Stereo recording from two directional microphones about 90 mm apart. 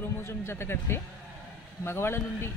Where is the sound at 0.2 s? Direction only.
30° left (ahead or behind).